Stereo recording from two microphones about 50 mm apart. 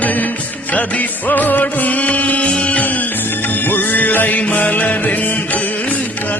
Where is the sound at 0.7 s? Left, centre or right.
Left.